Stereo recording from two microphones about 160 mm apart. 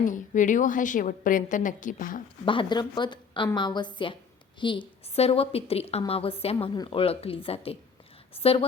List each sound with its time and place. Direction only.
0.0 s a woman's voice: 55° left (ahead or behind)
2.4 s a woman's voice: 30° left (ahead or behind)